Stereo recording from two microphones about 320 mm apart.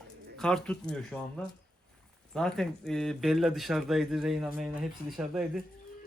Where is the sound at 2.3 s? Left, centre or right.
Centre.